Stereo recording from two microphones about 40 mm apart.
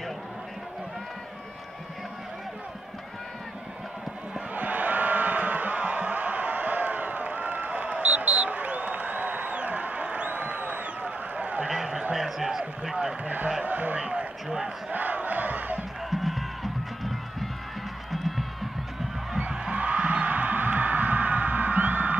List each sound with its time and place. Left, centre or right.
4.3 s crowd: right
11.7 s a sound: centre
12.9 s a sound: right
14.9 s battle cry: right
16.1 s music: centre
18.1 s crowd: centre
19.5 s music: right